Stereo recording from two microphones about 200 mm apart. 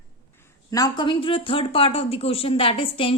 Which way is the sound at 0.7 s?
20° left (ahead or behind).